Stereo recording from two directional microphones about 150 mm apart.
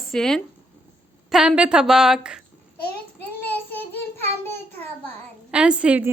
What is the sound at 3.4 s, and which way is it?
Child singing, 15° left (ahead or behind).